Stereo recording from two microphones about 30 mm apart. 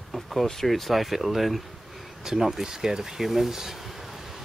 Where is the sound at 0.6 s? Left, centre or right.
Centre.